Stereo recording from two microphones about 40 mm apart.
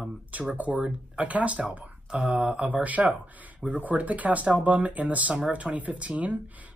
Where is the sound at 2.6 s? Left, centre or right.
Right.